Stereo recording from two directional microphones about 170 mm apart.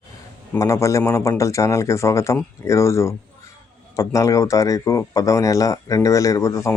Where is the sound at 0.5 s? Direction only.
15° left (ahead or behind).